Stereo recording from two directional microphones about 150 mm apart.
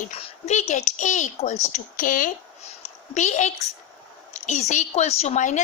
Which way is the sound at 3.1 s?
55° left (ahead or behind).